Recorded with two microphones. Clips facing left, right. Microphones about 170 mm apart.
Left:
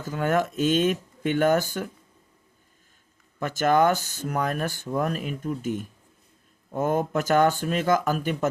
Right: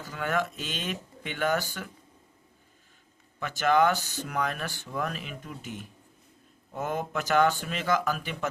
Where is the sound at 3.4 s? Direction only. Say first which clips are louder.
Left 3 dB; 45° left (ahead or behind).